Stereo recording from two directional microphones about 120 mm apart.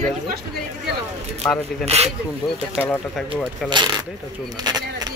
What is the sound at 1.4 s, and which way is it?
Speech, 15° left (ahead or behind).